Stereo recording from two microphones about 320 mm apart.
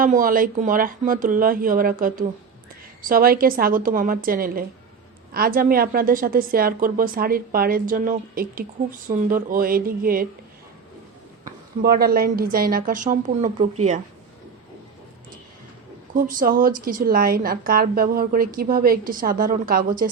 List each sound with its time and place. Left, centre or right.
0.0 s a woman's voice: right
11.8 s a woman's voice: right
16.1 s a woman's voice: right